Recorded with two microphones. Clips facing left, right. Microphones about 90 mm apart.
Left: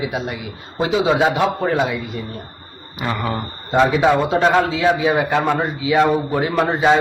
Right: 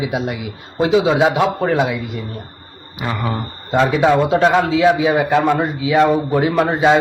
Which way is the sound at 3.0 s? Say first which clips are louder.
Even; centre (ahead or behind).